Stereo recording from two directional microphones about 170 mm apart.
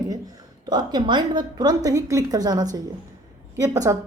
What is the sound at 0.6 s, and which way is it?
A woman's voice, 25° right (ahead or behind).